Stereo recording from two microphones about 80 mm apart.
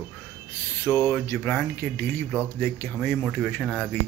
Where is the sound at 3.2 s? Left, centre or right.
Centre.